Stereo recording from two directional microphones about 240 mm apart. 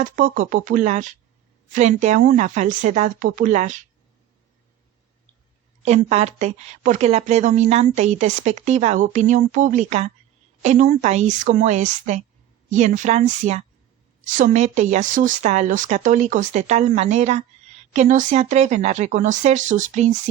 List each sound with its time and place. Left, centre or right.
0.0 s speech: right
5.8 s a woman's voice: right